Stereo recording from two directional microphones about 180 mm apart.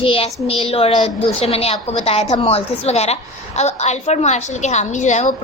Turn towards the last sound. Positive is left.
turn(degrees=40)  # may be behind; listen again after turning